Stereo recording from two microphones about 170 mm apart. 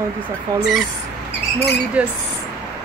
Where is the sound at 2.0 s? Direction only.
5° right (ahead or behind).